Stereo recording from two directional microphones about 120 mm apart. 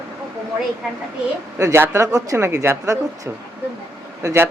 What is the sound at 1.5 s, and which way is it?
Speech, 25° right (ahead or behind).